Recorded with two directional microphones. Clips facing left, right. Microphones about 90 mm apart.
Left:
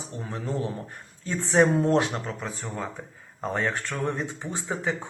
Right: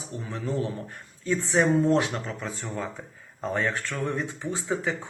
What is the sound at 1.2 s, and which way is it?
Speech, 40° left (ahead or behind).